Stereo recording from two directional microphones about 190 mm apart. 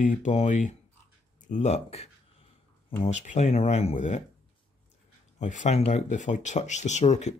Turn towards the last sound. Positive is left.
turn(degrees=35)  # may be behind; listen again after turning